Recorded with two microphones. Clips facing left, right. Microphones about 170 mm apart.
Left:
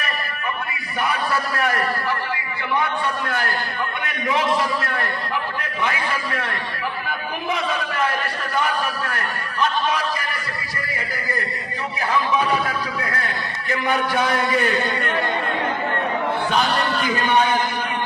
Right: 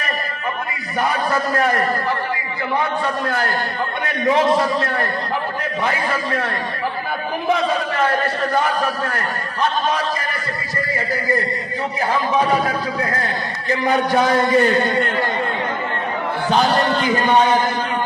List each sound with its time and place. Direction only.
1.0 s a man's voice: 35° right (ahead or behind)
3.2 s a man's voice: 30° right (ahead or behind)
7.5 s a man's voice: 35° right (ahead or behind)
11.9 s a man's voice: 30° right (ahead or behind)
16.5 s a man's voice: 30° right (ahead or behind)